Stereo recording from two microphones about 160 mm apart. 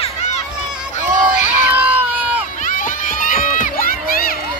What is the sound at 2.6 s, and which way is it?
Run, 55° left (ahead or behind).